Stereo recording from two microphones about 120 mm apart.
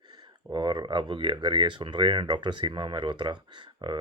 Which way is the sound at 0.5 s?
40° right (ahead or behind).